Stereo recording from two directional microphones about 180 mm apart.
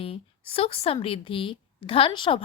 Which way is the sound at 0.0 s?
30° left (ahead or behind).